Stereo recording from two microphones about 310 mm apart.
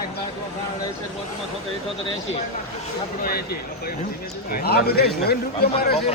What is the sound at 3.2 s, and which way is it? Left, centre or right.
A man's voice, left.